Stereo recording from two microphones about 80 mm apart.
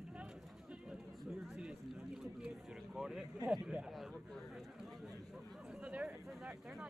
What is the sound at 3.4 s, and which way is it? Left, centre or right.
Speech, centre.